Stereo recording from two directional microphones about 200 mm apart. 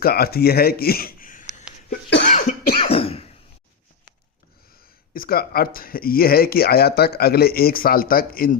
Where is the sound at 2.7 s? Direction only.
30° left (ahead or behind).